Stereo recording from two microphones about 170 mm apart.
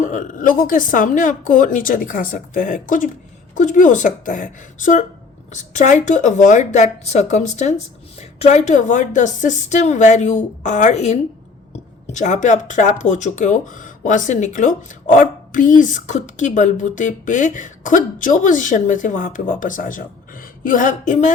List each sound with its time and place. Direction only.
0.0 s speech: 50° left (ahead or behind)